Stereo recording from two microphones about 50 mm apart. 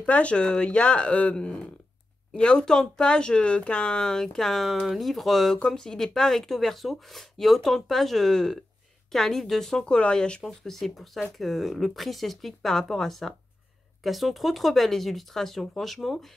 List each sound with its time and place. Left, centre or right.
0.0 s speech: left
2.3 s speech: centre
10.4 s speech: centre